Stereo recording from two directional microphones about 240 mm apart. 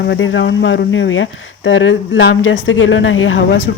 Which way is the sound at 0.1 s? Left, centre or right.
Left.